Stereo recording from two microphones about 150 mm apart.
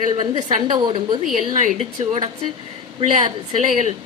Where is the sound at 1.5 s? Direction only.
55° right (ahead or behind).